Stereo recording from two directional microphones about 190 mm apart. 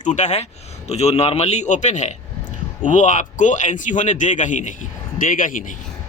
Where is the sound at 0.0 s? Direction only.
40° left (ahead or behind).